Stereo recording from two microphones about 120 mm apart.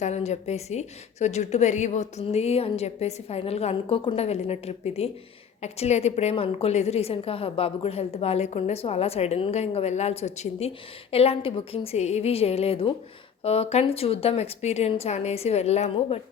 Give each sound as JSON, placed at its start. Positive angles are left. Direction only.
{"t": 0.0, "sound": "a woman's voice", "side_deg": 70}
{"t": 11.1, "sound": "a woman's voice", "side_deg": 55}